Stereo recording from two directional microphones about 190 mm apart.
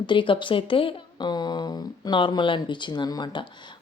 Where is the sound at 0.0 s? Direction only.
25° left (ahead or behind).